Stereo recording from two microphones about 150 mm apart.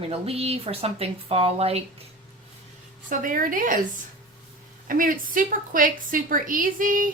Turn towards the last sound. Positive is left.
turn(degrees=-65)  # may be behind; listen again after turning